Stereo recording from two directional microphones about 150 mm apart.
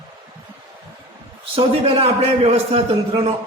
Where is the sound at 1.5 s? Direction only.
40° right (ahead or behind).